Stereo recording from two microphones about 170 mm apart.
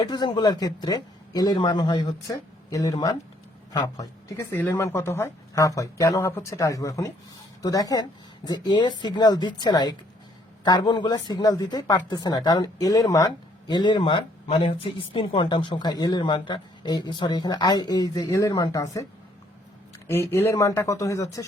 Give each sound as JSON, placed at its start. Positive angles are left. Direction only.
{"t": 0.0, "sound": "speech", "side_deg": 25}
{"t": 20.1, "sound": "speech", "side_deg": 15}